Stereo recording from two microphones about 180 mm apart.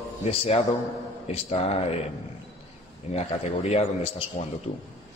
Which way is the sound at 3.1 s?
35° left (ahead or behind).